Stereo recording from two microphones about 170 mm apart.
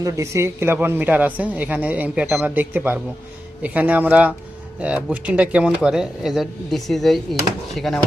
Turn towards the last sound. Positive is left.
turn(degrees=0)  # may be behind; listen again after turning